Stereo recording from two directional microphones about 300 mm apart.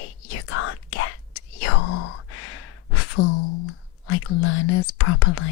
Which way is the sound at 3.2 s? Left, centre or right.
Left.